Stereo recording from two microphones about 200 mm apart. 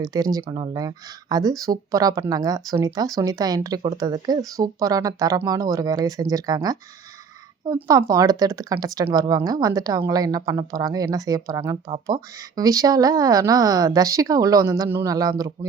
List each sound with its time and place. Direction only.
0.0 s speech: 20° right (ahead or behind)
7.8 s speech: 15° right (ahead or behind)